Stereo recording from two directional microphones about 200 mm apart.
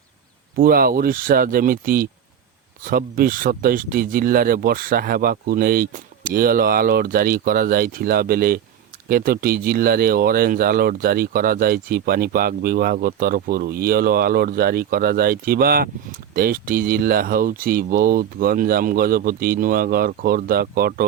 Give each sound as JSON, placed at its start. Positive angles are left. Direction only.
{"t": 0.5, "sound": "speech", "side_deg": -45}